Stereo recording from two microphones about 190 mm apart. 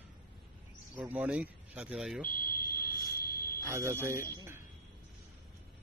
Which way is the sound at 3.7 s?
15° right (ahead or behind).